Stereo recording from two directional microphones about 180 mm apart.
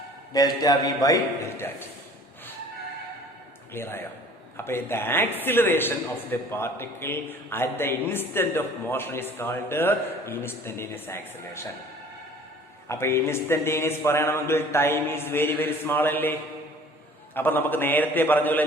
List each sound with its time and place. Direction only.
0.3 s a man's voice: 20° left (ahead or behind)
3.7 s a man's voice: 15° left (ahead or behind)
12.9 s a man's voice: 15° left (ahead or behind)
17.3 s a man's voice: 10° left (ahead or behind)